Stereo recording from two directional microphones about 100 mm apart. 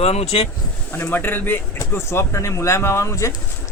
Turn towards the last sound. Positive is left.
turn(degrees=30)  # may be behind; listen again after turning